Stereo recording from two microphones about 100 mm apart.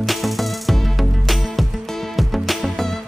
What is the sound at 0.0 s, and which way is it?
Music, centre (ahead or behind).